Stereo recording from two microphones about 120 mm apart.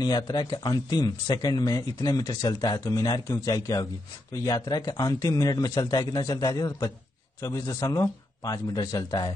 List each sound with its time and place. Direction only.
0.0 s a man's voice: 35° left (ahead or behind)